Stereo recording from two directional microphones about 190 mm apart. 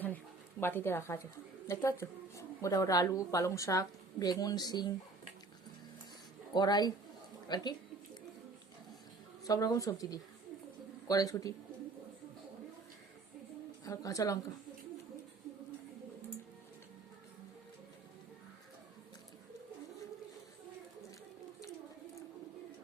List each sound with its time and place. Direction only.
0.6 s speech: 10° left (ahead or behind)
6.5 s a woman's voice: 20° left (ahead or behind)
9.4 s a woman's voice: 20° left (ahead or behind)
13.8 s speech: 15° left (ahead or behind)